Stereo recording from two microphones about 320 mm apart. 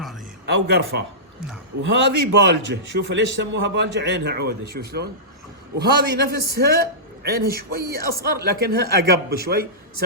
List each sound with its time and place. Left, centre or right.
0.4 s a man's voice: right